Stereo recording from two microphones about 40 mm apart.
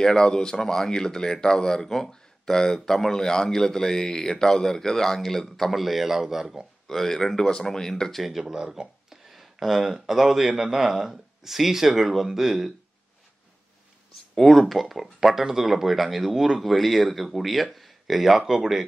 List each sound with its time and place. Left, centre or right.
0.0 s speech: centre
5.7 s speech: centre
6.9 s speech: centre
8.1 s speech: centre
8.5 s speech: right
9.1 s a sound: centre
9.8 s speech: centre
14.3 s speech: centre